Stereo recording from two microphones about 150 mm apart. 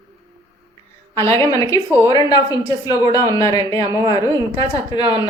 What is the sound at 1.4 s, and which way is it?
A woman's voice, 25° left (ahead or behind).